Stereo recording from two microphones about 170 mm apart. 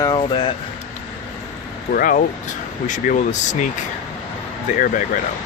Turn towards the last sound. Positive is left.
turn(degrees=50)  # may be behind; listen again after turning